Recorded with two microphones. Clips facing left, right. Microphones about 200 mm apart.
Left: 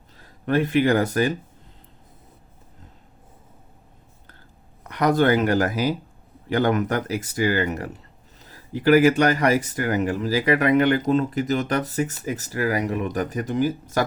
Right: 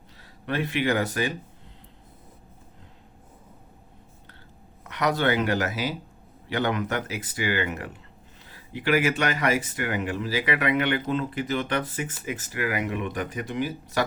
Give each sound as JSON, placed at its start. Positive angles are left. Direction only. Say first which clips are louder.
{"t": 0.2, "sound": "speech", "louder": "left 7 dB", "side_deg": 45}
{"t": 4.8, "sound": "speech", "louder": "left 6 dB", "side_deg": 45}